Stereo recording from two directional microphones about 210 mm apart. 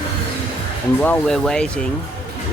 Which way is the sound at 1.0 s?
5° left (ahead or behind).